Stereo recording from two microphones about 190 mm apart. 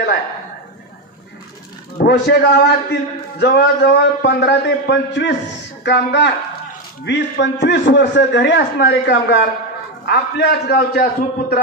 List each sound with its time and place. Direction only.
2.0 s a man's voice: 55° left (ahead or behind)